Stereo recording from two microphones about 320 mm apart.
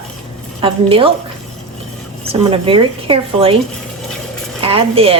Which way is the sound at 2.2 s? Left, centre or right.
Centre.